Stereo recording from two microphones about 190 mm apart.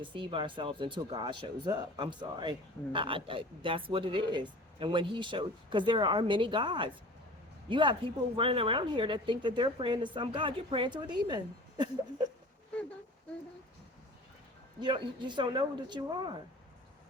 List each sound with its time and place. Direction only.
0.0 s speech: 25° right (ahead or behind)
14.8 s speech: 25° right (ahead or behind)